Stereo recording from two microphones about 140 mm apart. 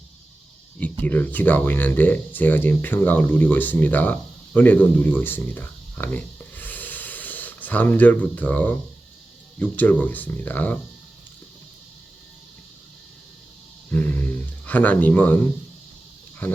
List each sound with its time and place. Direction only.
0.8 s speech: 10° left (ahead or behind)
13.9 s a sound: 15° left (ahead or behind)
16.4 s speech: 10° left (ahead or behind)